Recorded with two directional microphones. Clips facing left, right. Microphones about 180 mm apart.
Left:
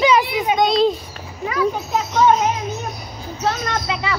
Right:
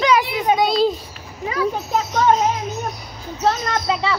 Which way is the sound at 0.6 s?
5° right (ahead or behind).